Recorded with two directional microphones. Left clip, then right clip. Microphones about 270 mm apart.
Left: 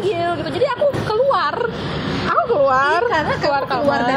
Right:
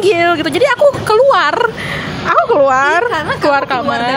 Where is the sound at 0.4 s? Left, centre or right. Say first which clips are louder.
Right 7 dB; right.